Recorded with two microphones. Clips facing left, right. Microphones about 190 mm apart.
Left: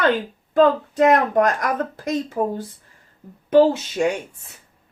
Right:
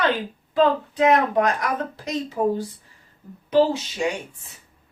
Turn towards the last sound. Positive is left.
turn(degrees=50)  # may be behind; listen again after turning